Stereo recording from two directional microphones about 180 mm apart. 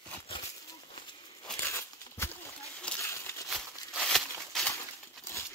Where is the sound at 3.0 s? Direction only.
15° left (ahead or behind).